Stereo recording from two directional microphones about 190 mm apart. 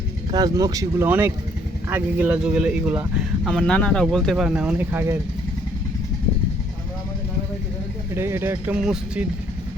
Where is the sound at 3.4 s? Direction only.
5° left (ahead or behind); by 5.1 s 10° right (ahead or behind).